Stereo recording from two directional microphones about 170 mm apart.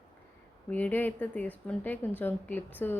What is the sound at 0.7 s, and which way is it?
Speech, 10° left (ahead or behind).